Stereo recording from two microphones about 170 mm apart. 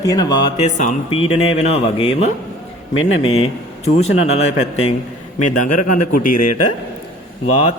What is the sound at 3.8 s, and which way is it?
Speech, 40° left (ahead or behind).